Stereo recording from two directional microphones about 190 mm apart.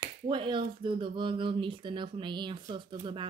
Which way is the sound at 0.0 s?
25° right (ahead or behind).